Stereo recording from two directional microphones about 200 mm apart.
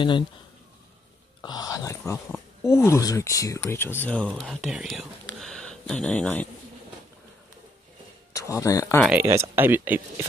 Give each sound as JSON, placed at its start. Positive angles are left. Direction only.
{"t": 1.4, "sound": "speech", "side_deg": 20}
{"t": 8.4, "sound": "speech", "side_deg": 15}
{"t": 9.0, "sound": "speech", "side_deg": -10}